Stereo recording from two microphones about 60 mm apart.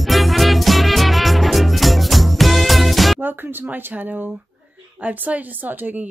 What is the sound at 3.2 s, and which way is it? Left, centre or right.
Music, right.